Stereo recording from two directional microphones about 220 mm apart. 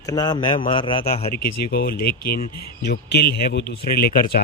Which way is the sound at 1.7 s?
45° left (ahead or behind).